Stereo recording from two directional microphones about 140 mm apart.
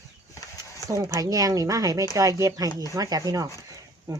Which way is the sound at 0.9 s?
20° right (ahead or behind).